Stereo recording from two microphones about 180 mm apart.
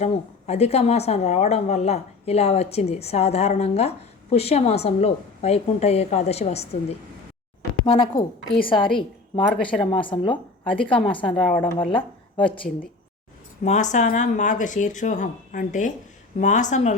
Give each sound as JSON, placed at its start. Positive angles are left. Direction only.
{"t": 0.0, "sound": "a woman's voice", "side_deg": 35}
{"t": 7.9, "sound": "speech", "side_deg": 30}
{"t": 13.6, "sound": "speech", "side_deg": 50}